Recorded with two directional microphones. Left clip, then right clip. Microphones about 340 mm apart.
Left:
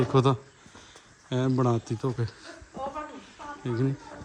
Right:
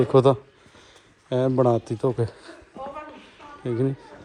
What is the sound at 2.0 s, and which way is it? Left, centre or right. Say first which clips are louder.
Speech: right 8 dB; centre.